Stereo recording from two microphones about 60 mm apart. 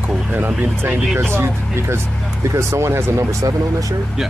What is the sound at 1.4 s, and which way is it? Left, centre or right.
Speech, right.